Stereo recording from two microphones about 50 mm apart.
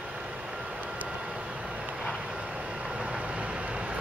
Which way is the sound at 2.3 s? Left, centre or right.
Centre.